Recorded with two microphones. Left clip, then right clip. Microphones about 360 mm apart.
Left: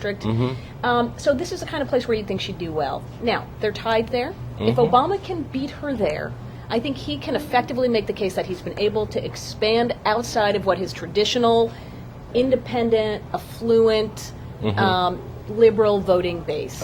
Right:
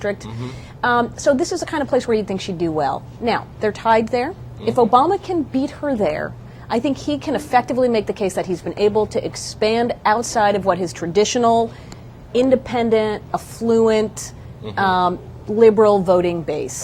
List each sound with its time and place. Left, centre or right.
0.0 s a woman's voice: right
12.3 s a woman's voice: right